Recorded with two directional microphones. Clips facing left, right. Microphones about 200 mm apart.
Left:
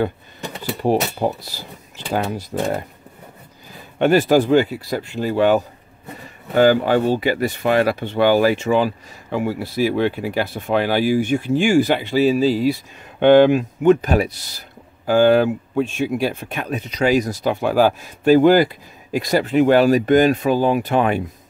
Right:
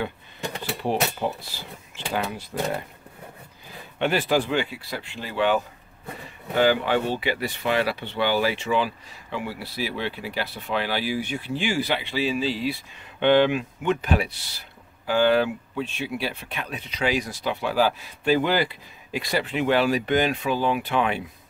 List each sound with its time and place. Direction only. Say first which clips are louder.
0.8 s speech: left 7 dB; 40° left (ahead or behind)
4.0 s speech: left 8 dB; 45° left (ahead or behind)